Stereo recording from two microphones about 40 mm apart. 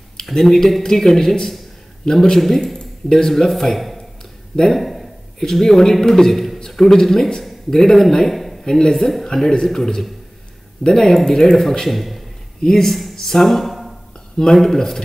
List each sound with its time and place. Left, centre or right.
0.2 s speech: centre
3.7 s a sound: centre
4.6 s a man's voice: centre
8.6 s a man's voice: centre
14.3 s speech: centre